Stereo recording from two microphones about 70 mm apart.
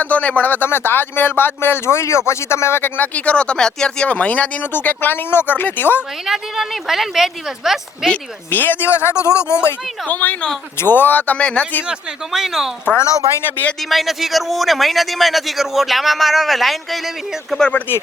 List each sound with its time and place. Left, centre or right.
0.0 s speech: left
6.2 s a man's voice: centre
8.4 s speech: left
10.1 s speech: left
11.9 s a man's voice: centre
13.9 s a man's voice: centre
17.6 s speech: centre